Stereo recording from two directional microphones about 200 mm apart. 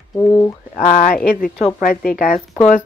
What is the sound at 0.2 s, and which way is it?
Speech, 15° left (ahead or behind).